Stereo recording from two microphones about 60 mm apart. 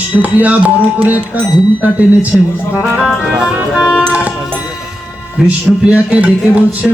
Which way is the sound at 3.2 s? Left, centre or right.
Centre.